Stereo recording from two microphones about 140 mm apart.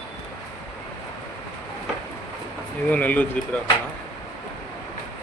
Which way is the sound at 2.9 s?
10° left (ahead or behind).